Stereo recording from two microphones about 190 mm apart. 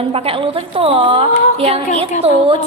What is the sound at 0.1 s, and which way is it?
A woman's voice, 30° right (ahead or behind).